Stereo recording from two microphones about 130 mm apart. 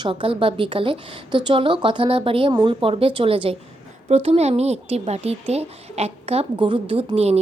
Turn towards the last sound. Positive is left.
turn(degrees=-55)  # may be behind; listen again after turning